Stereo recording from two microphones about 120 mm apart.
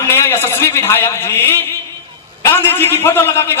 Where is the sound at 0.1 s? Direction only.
20° left (ahead or behind).